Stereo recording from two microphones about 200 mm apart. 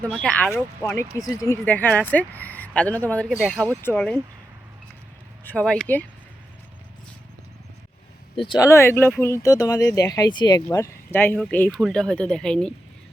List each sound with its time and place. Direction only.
0.0 s speech: 5° left (ahead or behind)
5.5 s speech: 5° left (ahead or behind)
8.4 s speech: 20° left (ahead or behind); by 12.7 s 5° left (ahead or behind)